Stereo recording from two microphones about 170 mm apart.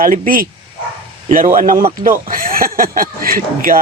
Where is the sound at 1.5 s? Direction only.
55° right (ahead or behind).